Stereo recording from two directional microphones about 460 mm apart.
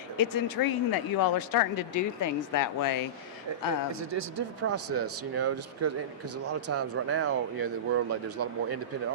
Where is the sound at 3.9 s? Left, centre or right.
Right.